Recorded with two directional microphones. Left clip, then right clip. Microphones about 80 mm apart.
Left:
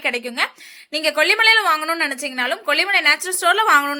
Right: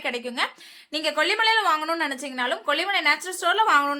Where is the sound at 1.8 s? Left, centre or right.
Centre; by 3.9 s left.